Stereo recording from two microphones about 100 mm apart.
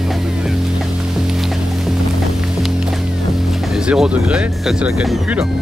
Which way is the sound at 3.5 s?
5° right (ahead or behind).